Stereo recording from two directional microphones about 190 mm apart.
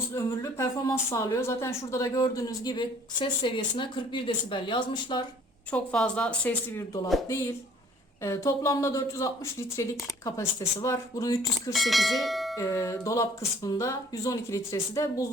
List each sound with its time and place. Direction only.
0.2 s a woman's voice: 15° left (ahead or behind)
5.7 s speech: 5° left (ahead or behind)
11.7 s bell: centre (ahead or behind)
12.5 s speech: 15° left (ahead or behind)